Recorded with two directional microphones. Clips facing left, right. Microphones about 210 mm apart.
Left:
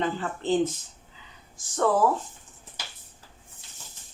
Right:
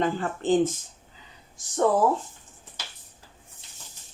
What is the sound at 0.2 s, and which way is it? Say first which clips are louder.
Speech: right 2 dB; 50° right (ahead or behind).